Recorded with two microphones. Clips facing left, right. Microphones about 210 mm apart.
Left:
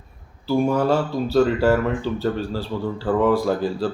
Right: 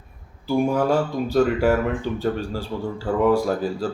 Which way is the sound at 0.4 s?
15° right (ahead or behind).